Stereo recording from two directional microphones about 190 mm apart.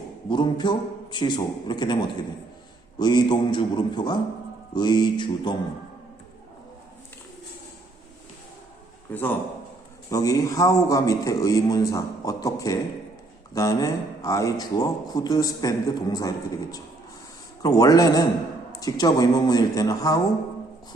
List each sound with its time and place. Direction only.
0.3 s speech: 25° left (ahead or behind)
9.0 s a man's voice: 10° left (ahead or behind)
17.6 s speech: 20° left (ahead or behind)